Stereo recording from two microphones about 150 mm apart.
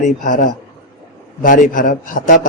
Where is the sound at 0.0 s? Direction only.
60° left (ahead or behind).